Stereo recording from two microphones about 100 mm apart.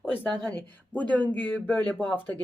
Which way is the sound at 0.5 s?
15° left (ahead or behind).